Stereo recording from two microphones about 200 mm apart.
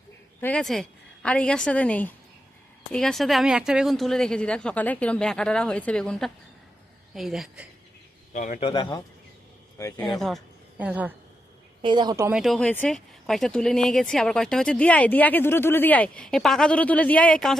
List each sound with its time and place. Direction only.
0.4 s speech: 5° left (ahead or behind)
8.3 s a man's voice: 40° left (ahead or behind)
8.6 s speech: 20° left (ahead or behind)
10.1 s speech: centre (ahead or behind)
11.8 s speech: 20° right (ahead or behind)
12.4 s speech: 5° left (ahead or behind)